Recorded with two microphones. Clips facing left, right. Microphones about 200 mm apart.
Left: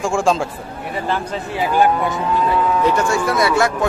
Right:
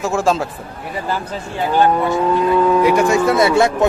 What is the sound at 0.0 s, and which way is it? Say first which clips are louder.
Speech: even; 5° right (ahead or behind).